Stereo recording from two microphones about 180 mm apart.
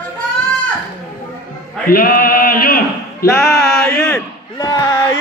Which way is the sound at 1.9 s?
55° left (ahead or behind).